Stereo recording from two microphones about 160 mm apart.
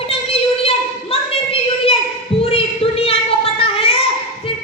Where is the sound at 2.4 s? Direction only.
35° left (ahead or behind).